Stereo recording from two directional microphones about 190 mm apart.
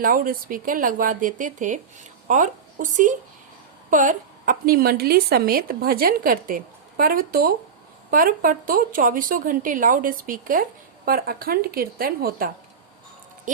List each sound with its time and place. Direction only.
0.0 s a woman's voice: 50° right (ahead or behind)